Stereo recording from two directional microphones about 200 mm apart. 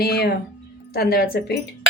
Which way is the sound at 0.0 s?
50° left (ahead or behind).